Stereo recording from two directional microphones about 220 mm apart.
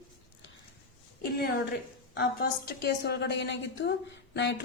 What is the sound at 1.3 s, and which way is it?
A woman's voice, 45° left (ahead or behind).